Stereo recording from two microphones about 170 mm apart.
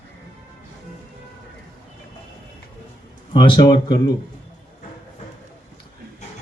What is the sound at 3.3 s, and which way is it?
Speech, 25° left (ahead or behind).